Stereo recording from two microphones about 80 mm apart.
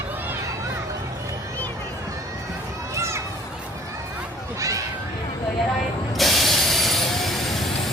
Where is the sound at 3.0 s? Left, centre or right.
Right.